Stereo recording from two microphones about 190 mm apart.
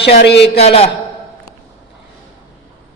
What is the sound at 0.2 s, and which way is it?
Speech, 65° left (ahead or behind).